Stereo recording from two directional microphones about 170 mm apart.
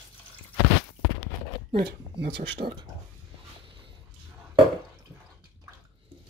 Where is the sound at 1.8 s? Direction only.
70° right (ahead or behind).